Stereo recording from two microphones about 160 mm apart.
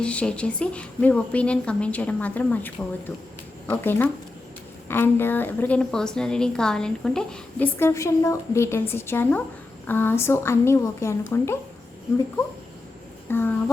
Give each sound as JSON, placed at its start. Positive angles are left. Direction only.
{"t": 0.0, "sound": "a woman's voice", "side_deg": 5}
{"t": 7.8, "sound": "a woman's voice", "side_deg": 15}
{"t": 13.3, "sound": "a woman's voice", "side_deg": 15}